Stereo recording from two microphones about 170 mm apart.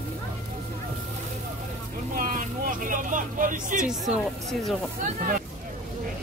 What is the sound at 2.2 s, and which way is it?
Vehicle, 50° right (ahead or behind).